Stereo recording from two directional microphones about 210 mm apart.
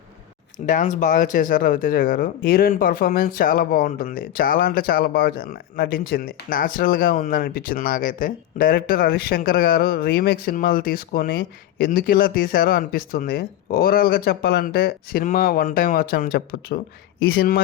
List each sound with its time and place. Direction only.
0.6 s speech: 40° left (ahead or behind)